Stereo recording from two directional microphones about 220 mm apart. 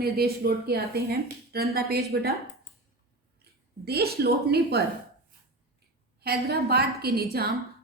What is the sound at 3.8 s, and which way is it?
A woman's voice, 45° right (ahead or behind).